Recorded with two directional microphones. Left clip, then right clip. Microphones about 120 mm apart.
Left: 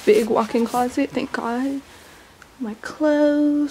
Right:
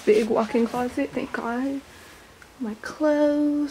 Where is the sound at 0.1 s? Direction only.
30° left (ahead or behind).